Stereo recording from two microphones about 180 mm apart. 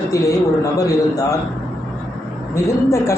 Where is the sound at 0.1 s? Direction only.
20° left (ahead or behind).